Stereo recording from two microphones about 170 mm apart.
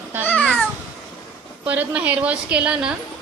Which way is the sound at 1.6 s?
10° right (ahead or behind).